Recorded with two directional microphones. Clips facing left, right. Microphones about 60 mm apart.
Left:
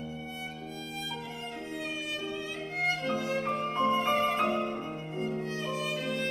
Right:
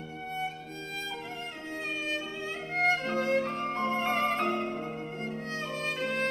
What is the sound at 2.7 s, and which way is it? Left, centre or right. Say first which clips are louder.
Music: right 3 dB; right.